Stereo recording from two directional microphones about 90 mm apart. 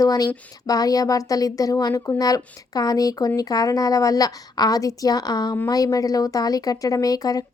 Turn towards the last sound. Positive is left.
turn(degrees=45)  # may be behind; listen again after turning